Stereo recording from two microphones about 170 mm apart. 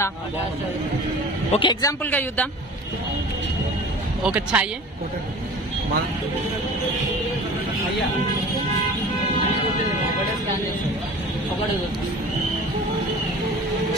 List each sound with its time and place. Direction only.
1.5 s speech: 30° left (ahead or behind); by 2.4 s 10° left (ahead or behind)
4.2 s speech: 10° right (ahead or behind)